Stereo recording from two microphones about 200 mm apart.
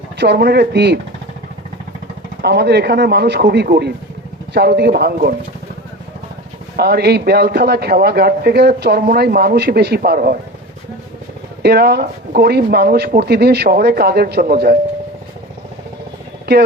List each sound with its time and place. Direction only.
0.2 s speech: 55° right (ahead or behind)
2.4 s a man's voice: 55° right (ahead or behind)
6.7 s a man's voice: 55° right (ahead or behind)
11.6 s a man's voice: 55° right (ahead or behind)